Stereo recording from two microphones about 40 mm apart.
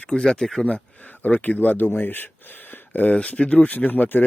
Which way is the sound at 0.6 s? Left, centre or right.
Left.